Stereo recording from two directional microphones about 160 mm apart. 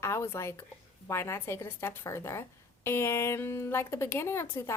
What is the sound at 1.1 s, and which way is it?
A woman's voice, 15° left (ahead or behind).